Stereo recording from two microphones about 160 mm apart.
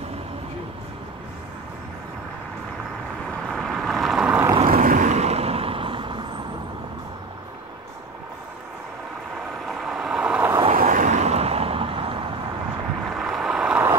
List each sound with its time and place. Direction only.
3.3 s vehicle: 5° left (ahead or behind)
4.6 s vehicle: 60° right (ahead or behind); by 6.4 s 30° right (ahead or behind)
9.7 s vehicle: centre (ahead or behind)
10.8 s vehicle: 55° right (ahead or behind); by 12.3 s 35° right (ahead or behind)
13.1 s boat: centre (ahead or behind)